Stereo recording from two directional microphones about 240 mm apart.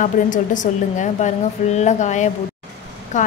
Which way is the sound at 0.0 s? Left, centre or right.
Left.